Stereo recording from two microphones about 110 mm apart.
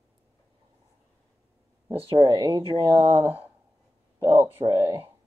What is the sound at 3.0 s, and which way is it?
Speech, 70° right (ahead or behind).